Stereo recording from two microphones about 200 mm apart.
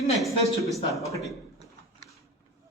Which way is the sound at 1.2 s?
Centre (ahead or behind).